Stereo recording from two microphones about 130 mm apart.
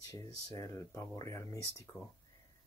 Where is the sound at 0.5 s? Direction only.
25° left (ahead or behind).